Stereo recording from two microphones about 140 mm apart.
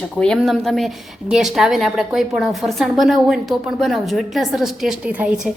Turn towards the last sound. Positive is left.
turn(degrees=-10)  # may be behind; listen again after turning